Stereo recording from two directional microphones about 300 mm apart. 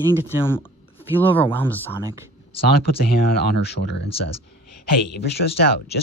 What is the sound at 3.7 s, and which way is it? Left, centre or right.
Speech, left.